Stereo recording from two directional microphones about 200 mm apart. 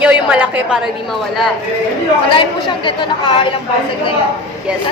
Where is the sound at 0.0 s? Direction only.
5° right (ahead or behind).